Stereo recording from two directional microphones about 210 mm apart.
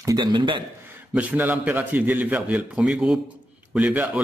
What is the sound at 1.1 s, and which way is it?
Speech, 10° right (ahead or behind).